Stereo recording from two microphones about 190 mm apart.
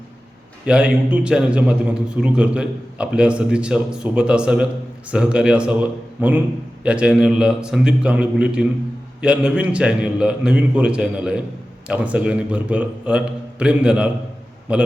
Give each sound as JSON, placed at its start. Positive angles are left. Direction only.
{"t": 0.6, "sound": "a man's voice", "side_deg": -5}